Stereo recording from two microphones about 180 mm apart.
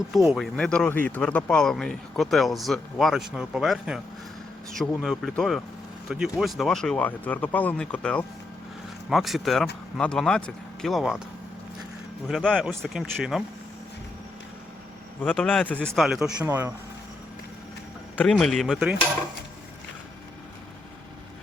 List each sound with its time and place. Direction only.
0.1 s speech: centre (ahead or behind)
5.0 s speech: centre (ahead or behind)
12.3 s speech: 5° left (ahead or behind)
15.2 s a man's voice: 10° left (ahead or behind); by 16.7 s 10° right (ahead or behind)
18.2 s speech: 5° left (ahead or behind)